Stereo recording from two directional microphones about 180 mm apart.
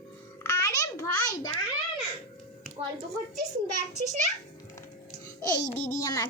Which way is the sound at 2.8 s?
30° right (ahead or behind).